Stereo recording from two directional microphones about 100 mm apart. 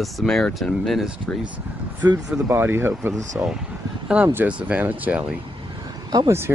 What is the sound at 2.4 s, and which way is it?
Speech, 20° right (ahead or behind).